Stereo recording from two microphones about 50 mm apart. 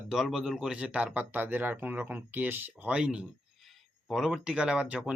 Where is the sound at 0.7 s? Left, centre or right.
Right.